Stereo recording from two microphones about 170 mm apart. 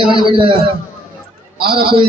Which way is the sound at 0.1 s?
30° right (ahead or behind).